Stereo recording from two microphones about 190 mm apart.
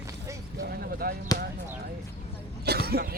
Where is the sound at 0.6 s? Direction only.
55° right (ahead or behind).